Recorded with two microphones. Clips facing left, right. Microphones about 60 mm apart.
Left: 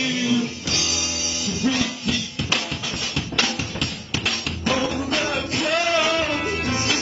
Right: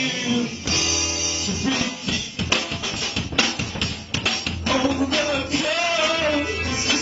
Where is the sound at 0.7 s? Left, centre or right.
Right.